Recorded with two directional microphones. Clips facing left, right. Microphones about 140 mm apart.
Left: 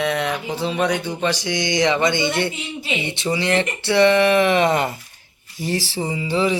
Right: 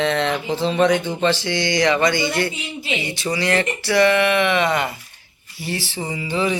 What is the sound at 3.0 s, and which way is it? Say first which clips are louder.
Speech: left 1 dB; 25° left (ahead or behind).